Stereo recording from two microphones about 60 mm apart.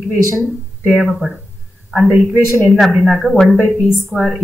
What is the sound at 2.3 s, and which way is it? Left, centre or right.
Speech, left.